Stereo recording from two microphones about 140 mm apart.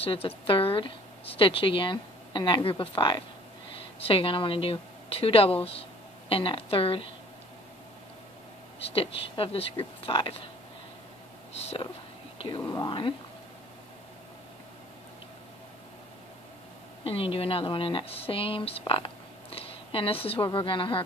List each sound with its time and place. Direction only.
0.0 s a woman's voice: 40° left (ahead or behind)
8.9 s a woman's voice: 40° left (ahead or behind)
11.6 s speech: 45° left (ahead or behind)
12.6 s a woman's voice: 30° left (ahead or behind)
17.0 s a woman's voice: 40° left (ahead or behind)